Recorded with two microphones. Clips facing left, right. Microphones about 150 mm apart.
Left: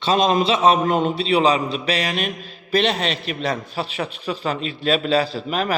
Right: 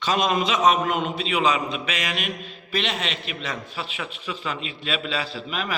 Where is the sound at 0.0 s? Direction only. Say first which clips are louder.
Left 5 dB; 30° left (ahead or behind).